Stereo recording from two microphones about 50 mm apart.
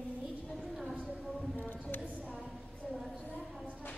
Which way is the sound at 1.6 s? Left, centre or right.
Left.